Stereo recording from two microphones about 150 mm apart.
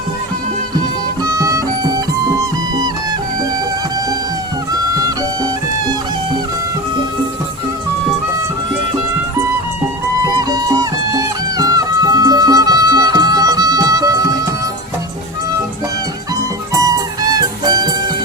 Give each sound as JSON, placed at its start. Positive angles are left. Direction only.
{"t": 1.2, "sound": "music", "side_deg": -20}
{"t": 10.3, "sound": "music", "side_deg": -25}
{"t": 17.7, "sound": "music", "side_deg": -25}